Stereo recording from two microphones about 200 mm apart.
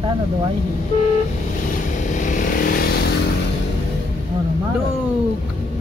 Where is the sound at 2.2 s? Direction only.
40° left (ahead or behind).